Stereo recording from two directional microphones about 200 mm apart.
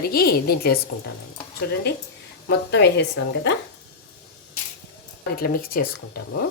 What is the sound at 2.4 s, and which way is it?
Speech, 55° left (ahead or behind).